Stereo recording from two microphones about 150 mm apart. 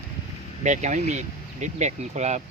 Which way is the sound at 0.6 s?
50° right (ahead or behind).